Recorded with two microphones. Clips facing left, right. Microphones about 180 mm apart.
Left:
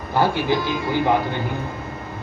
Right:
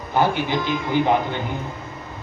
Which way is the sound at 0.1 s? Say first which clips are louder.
Left 1 dB; 20° right (ahead or behind).